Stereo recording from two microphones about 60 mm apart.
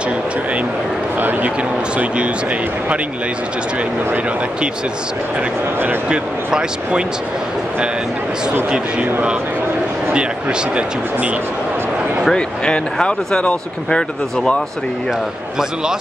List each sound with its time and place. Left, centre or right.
6.0 s speech: centre
12.3 s speech: centre